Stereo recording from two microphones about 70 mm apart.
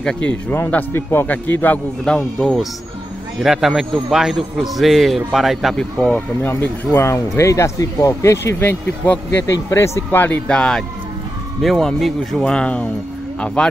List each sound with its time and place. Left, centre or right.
0.0 s speech: centre
0.9 s speech: left
2.0 s speech: centre
3.3 s a man's voice: centre
5.8 s speech: centre
6.5 s speech: left
8.5 s speech: left
9.7 s speech: left
10.1 s speech: left
10.5 s speech: centre
11.6 s speech: centre